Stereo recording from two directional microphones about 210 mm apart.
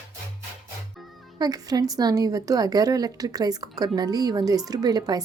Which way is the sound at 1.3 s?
20° right (ahead or behind).